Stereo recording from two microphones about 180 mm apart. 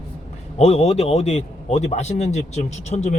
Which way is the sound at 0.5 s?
35° left (ahead or behind).